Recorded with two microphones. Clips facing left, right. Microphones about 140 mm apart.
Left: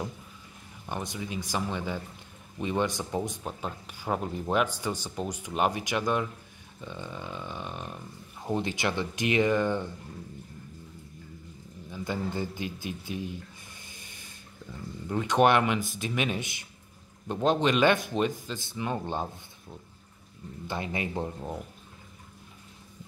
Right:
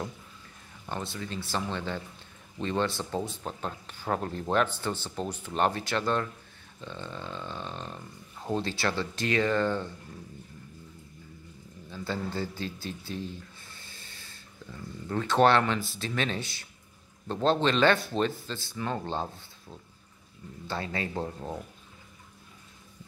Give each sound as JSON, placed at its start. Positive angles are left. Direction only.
{"t": 0.8, "sound": "speech", "side_deg": 15}
{"t": 11.9, "sound": "speech", "side_deg": 15}
{"t": 20.6, "sound": "speech", "side_deg": 20}
{"t": 21.4, "sound": "speech", "side_deg": 5}